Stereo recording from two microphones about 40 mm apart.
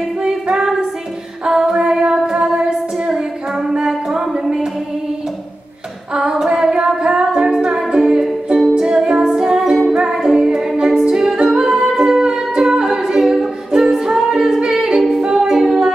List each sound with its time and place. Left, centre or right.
0.2 s music: centre
6.1 s music: centre
14.7 s a capella: centre